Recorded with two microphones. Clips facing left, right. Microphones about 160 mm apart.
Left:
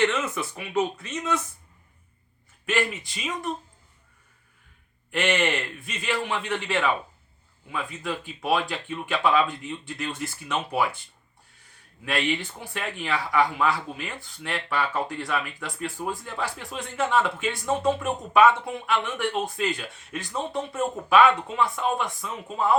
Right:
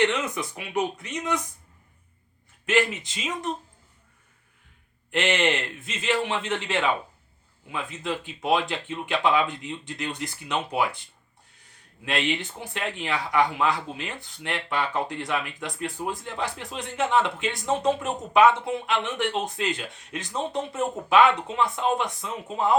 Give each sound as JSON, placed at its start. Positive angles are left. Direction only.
{"t": 0.0, "sound": "speech", "side_deg": -15}
{"t": 2.6, "sound": "speech", "side_deg": -20}
{"t": 5.1, "sound": "speech", "side_deg": -20}
{"t": 12.0, "sound": "speech", "side_deg": -20}